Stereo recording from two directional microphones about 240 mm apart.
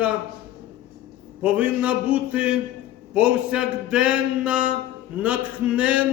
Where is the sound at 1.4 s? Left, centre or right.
Centre.